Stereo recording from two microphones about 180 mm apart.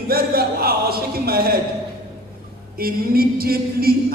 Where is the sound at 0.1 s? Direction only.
60° right (ahead or behind).